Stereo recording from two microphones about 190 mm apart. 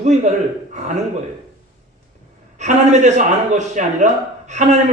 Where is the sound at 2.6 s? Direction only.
40° right (ahead or behind).